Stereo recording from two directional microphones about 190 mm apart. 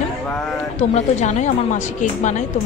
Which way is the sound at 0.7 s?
35° left (ahead or behind).